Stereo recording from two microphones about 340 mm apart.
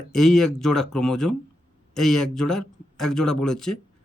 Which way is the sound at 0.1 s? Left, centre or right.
Centre.